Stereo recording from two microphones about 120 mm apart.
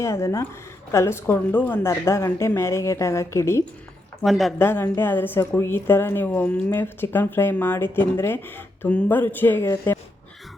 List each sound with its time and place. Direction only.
0.0 s a woman's voice: 25° left (ahead or behind)
4.2 s a woman's voice: centre (ahead or behind)
4.5 s a woman's voice: 20° left (ahead or behind)